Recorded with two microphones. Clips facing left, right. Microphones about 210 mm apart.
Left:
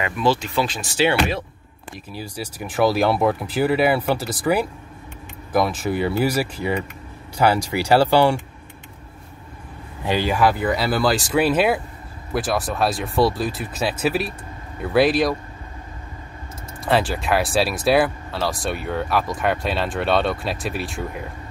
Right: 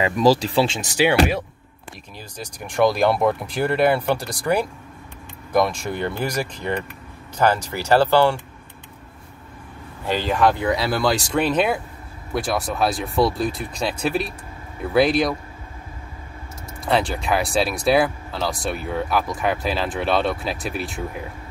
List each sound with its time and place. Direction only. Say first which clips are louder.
0.0 s speech: right 4 dB; 40° right (ahead or behind)
0.9 s speech: right 2 dB; 15° right (ahead or behind)
2.1 s speech: left 5 dB; 10° left (ahead or behind)
10.0 s speech: even; 10° left (ahead or behind)
16.8 s speech: left 1 dB; centre (ahead or behind)